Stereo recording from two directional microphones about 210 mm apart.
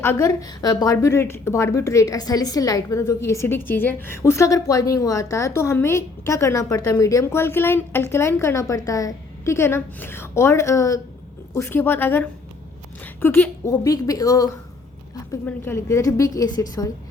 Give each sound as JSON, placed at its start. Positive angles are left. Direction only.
{"t": 0.0, "sound": "a woman's voice", "side_deg": 15}